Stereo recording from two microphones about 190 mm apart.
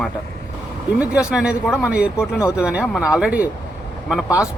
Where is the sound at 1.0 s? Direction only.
5° right (ahead or behind).